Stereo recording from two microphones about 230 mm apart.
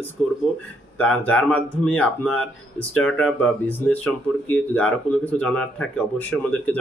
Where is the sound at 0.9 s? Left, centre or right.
Centre.